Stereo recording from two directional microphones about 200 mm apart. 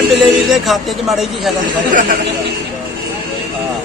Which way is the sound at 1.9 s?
40° right (ahead or behind).